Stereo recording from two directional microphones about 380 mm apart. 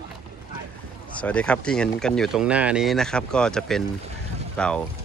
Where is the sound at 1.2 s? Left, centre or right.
Centre.